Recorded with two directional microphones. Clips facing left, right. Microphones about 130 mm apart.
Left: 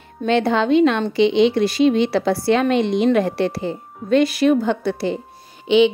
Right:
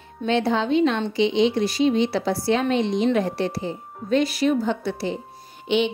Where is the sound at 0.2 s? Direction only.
60° left (ahead or behind).